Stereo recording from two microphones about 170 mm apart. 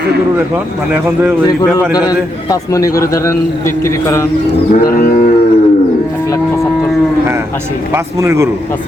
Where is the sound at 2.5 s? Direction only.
20° left (ahead or behind).